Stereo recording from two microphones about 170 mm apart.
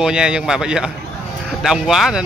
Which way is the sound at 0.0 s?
5° right (ahead or behind).